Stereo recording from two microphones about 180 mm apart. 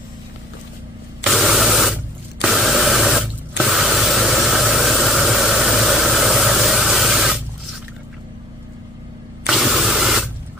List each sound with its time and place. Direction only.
1.2 s spray: centre (ahead or behind)
9.5 s ratchet: centre (ahead or behind)